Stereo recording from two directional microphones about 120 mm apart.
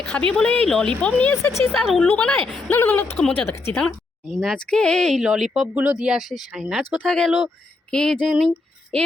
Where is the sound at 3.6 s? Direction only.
15° left (ahead or behind).